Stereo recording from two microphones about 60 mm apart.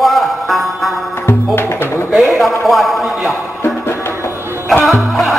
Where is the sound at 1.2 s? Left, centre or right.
Left.